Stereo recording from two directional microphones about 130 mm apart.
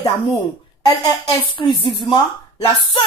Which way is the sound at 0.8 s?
35° left (ahead or behind).